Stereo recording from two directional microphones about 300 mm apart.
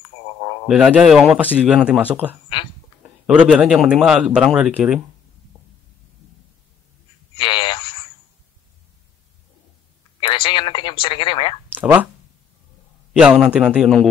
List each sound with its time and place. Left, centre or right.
0.7 s speech: centre
7.3 s radio: centre
10.2 s speech: centre
11.7 s speech: centre
13.1 s speech: centre